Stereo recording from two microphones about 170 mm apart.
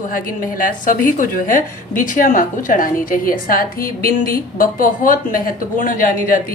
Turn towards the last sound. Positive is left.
turn(degrees=55)  # may be behind; listen again after turning